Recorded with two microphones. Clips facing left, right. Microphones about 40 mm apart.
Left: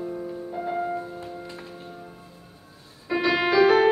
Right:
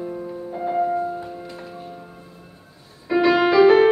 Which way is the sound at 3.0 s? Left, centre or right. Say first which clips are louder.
Right 6 dB; centre.